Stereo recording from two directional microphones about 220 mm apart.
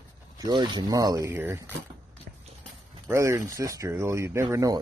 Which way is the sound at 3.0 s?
15° right (ahead or behind).